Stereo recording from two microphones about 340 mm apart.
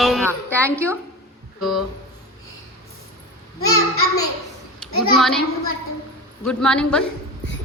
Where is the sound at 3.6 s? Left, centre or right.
Left.